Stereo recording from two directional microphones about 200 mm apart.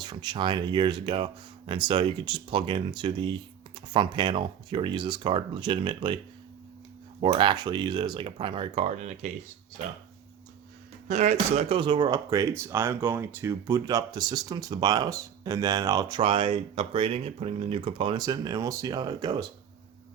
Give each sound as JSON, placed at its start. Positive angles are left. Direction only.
{"t": 0.0, "sound": "speech", "side_deg": -20}
{"t": 7.2, "sound": "speech", "side_deg": -25}
{"t": 11.1, "sound": "speech", "side_deg": -35}